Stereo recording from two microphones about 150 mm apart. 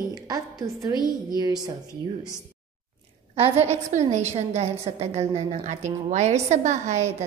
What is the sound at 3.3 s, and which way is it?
A woman's voice, 40° right (ahead or behind).